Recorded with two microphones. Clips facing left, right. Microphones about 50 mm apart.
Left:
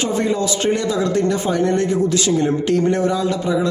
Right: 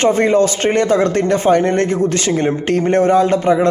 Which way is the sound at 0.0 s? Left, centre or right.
Right.